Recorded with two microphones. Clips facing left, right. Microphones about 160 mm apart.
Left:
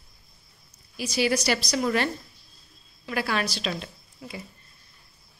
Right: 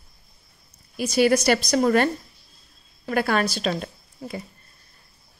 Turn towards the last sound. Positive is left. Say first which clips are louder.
# right 6 dB
turn(degrees=-45)  # may be behind; listen again after turning